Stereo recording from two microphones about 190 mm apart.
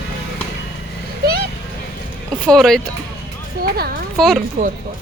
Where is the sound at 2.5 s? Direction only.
Centre (ahead or behind).